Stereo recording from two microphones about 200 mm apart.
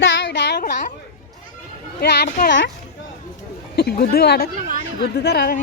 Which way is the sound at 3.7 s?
50° left (ahead or behind).